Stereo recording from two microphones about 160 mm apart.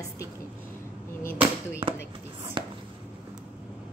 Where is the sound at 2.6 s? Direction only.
30° right (ahead or behind).